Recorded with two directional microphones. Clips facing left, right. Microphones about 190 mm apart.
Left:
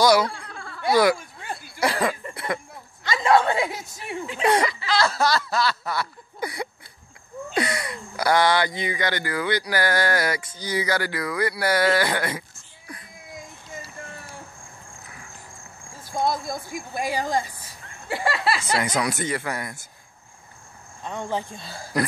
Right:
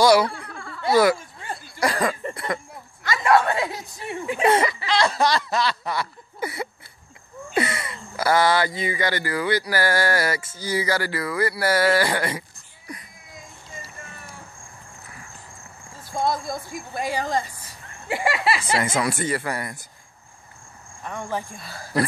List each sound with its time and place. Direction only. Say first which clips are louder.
0.0 s laughter: right 2 dB; 10° right (ahead or behind)
0.9 s a sound: right 1 dB; centre (ahead or behind)
3.0 s a sound: even; 25° left (ahead or behind)
4.4 s speech: right 1 dB; 10° right (ahead or behind)
5.7 s a sound: even; 15° right (ahead or behind)
7.5 s speech: right 1 dB; 5° right (ahead or behind)
16.7 s speech: left 1 dB; 10° left (ahead or behind)
18.0 s speech: right 1 dB; 15° right (ahead or behind)
21.0 s speech: left 1 dB; 20° left (ahead or behind)